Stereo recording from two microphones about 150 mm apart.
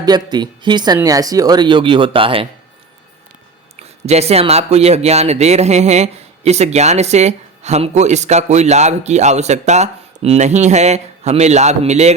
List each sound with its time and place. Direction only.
0.0 s speech: 30° right (ahead or behind)
3.8 s speech: 45° right (ahead or behind)